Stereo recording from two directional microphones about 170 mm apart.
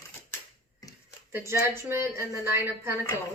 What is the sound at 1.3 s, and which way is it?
A woman's voice, 15° right (ahead or behind).